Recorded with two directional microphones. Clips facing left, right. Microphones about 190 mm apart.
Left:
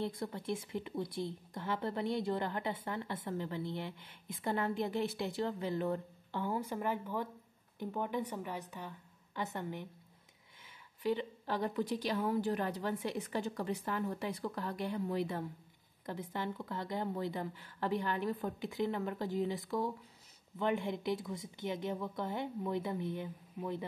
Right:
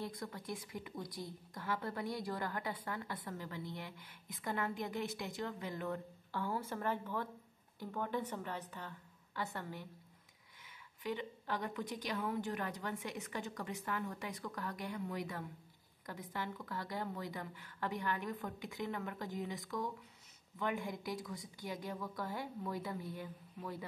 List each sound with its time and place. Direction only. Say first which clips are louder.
0.0 s speech: left 6 dB; 25° left (ahead or behind)
6.3 s a woman's voice: left 3 dB; 20° left (ahead or behind)
11.0 s a woman's voice: left 6 dB; 30° left (ahead or behind)